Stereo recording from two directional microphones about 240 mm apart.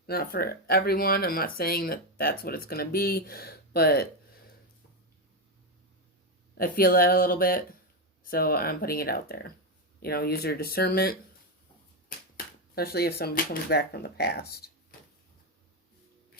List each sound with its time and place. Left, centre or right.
0.1 s speech: left
6.6 s speech: left
12.7 s speech: left